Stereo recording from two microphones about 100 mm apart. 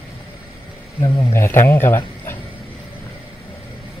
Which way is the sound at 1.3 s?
25° left (ahead or behind).